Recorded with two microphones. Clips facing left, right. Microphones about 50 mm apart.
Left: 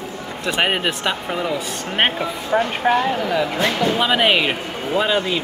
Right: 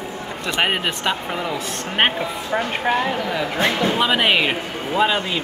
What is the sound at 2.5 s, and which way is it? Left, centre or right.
Speech, centre.